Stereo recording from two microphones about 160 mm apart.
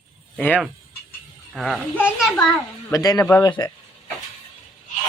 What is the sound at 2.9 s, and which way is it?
Speech, 20° left (ahead or behind).